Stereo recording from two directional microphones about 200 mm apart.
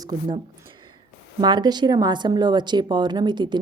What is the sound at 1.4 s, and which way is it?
A woman's voice, 20° right (ahead or behind).